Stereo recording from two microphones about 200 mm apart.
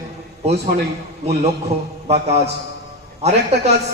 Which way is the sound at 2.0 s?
30° right (ahead or behind).